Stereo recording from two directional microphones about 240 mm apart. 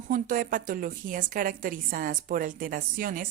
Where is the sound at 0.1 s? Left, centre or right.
Right.